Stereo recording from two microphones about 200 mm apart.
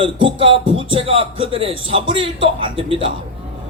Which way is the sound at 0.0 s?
25° right (ahead or behind).